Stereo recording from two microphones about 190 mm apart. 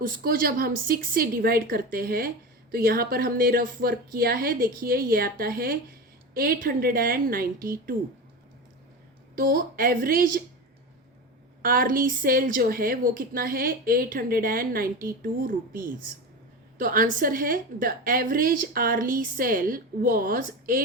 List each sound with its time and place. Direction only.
0.0 s a woman's voice: 50° right (ahead or behind)
9.3 s a woman's voice: 50° right (ahead or behind)
11.6 s a woman's voice: 50° right (ahead or behind)
16.7 s a woman's voice: 45° right (ahead or behind)